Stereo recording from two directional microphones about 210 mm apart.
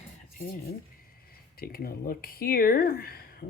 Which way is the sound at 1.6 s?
45° left (ahead or behind).